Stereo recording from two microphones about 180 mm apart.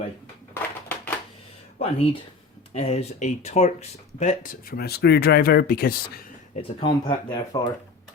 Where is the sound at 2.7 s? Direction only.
35° left (ahead or behind); by 6.2 s 55° left (ahead or behind).